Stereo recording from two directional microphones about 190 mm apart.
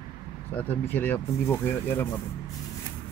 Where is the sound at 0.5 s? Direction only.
10° left (ahead or behind).